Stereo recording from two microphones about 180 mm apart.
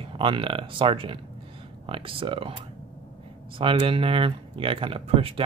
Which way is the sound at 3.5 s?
30° right (ahead or behind).